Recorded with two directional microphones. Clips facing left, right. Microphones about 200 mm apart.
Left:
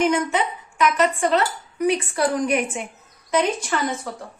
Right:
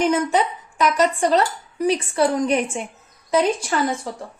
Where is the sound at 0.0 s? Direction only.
35° right (ahead or behind).